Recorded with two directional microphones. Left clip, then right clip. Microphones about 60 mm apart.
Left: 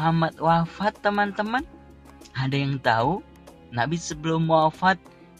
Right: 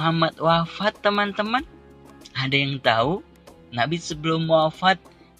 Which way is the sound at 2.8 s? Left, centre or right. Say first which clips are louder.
Even; centre.